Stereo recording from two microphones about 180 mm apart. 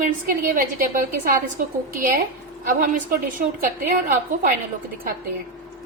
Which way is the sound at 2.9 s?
50° right (ahead or behind).